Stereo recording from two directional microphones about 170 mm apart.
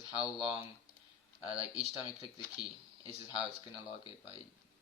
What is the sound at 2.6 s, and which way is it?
Speech, 25° left (ahead or behind).